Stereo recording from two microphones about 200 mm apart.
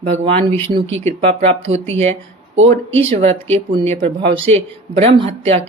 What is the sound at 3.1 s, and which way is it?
Speech, 30° right (ahead or behind).